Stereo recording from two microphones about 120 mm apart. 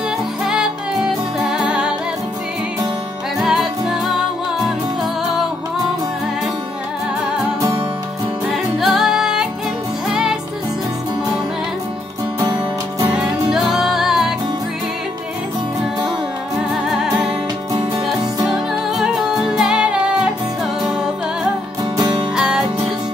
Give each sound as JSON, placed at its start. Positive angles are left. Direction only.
{"t": 0.5, "sound": "music", "side_deg": -5}
{"t": 3.3, "sound": "music", "side_deg": 0}
{"t": 8.7, "sound": "music", "side_deg": 0}
{"t": 13.1, "sound": "music", "side_deg": -5}
{"t": 16.5, "sound": "music", "side_deg": -5}
{"t": 18.5, "sound": "music", "side_deg": 0}
{"t": 21.9, "sound": "music", "side_deg": -35}
{"t": 22.3, "sound": "music", "side_deg": -5}